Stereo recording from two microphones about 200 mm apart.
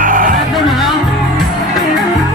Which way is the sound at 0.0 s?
45° right (ahead or behind).